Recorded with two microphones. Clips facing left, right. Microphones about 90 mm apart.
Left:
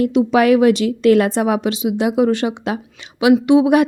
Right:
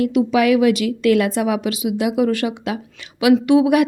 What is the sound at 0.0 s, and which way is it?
A woman's voice, 30° left (ahead or behind).